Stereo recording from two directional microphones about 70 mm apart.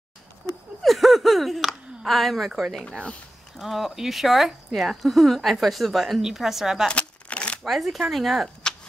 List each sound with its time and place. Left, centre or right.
0.8 s a sound: centre
2.7 s speech: centre
6.9 s shuffling cards: centre
7.6 s speech: centre